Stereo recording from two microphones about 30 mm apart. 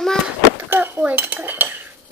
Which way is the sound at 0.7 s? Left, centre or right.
Right.